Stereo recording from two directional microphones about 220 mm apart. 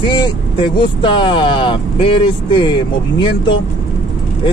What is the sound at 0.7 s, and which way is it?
Speech, 20° left (ahead or behind).